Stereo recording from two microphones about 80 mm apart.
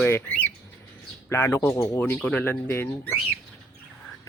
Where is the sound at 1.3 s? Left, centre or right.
Left.